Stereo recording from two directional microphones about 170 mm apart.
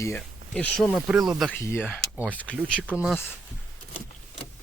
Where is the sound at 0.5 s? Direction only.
5° left (ahead or behind).